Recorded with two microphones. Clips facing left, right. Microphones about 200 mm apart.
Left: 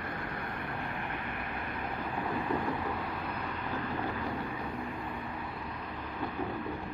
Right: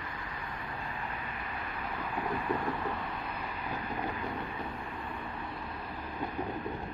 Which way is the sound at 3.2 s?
55° left (ahead or behind).